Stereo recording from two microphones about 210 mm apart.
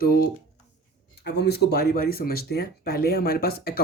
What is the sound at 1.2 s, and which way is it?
Speech, 50° left (ahead or behind).